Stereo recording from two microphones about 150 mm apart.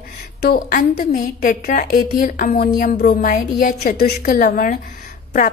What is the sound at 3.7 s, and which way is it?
A woman's voice, 80° left.